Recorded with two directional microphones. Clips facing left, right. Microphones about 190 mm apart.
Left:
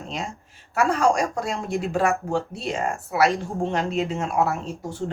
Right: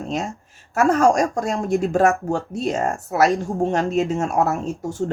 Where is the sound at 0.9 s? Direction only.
50° right (ahead or behind).